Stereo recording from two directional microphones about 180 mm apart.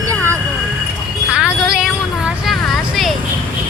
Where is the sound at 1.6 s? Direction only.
5° right (ahead or behind).